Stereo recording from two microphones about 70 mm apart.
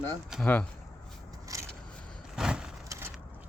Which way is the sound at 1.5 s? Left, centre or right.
Right.